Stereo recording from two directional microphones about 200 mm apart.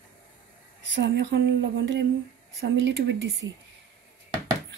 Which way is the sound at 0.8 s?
65° right (ahead or behind).